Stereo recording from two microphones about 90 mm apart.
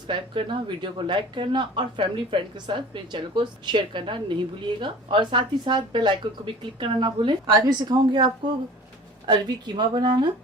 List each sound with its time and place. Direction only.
0.1 s speech: 65° right (ahead or behind)